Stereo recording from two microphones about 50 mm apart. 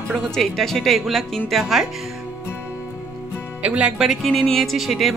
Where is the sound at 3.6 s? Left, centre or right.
Right.